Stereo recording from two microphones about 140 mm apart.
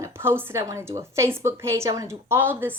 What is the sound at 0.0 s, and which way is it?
A woman's voice, 15° right (ahead or behind).